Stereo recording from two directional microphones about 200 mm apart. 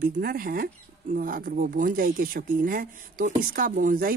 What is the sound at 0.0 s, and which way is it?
Speech, 45° right (ahead or behind).